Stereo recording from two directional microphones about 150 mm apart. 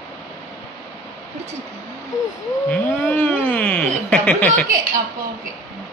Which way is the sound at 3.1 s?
10° left (ahead or behind).